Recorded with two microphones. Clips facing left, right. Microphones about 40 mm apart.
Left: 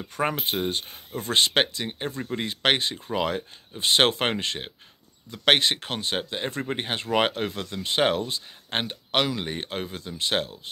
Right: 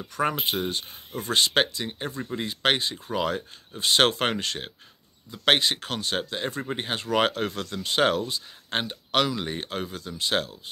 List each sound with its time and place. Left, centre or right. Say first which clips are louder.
0.0 s speech: right 1 dB; left